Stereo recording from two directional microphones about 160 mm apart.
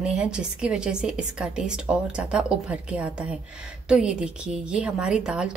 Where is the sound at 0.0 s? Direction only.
5° right (ahead or behind).